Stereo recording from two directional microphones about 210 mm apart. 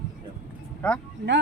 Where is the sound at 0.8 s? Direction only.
5° left (ahead or behind).